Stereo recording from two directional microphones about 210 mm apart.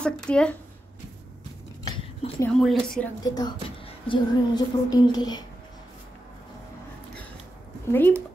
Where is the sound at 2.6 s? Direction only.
Centre (ahead or behind).